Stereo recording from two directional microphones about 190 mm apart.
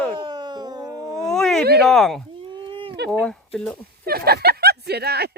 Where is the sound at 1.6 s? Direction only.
55° right (ahead or behind).